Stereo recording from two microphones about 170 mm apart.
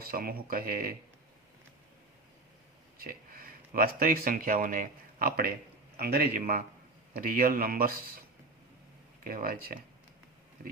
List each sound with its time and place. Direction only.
0.0 s speech: 60° right (ahead or behind)
3.0 s speech: 60° right (ahead or behind)
9.2 s speech: 60° right (ahead or behind)